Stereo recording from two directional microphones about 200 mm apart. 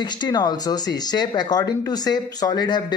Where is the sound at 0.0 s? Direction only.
20° left (ahead or behind).